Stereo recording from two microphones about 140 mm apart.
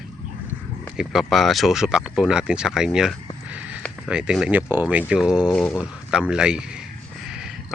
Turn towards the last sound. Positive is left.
turn(degrees=-5)  # may be behind; listen again after turning